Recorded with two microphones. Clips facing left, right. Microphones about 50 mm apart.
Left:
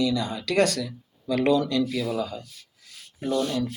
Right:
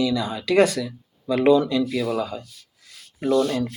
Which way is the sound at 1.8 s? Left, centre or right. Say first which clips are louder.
Right 3 dB; right.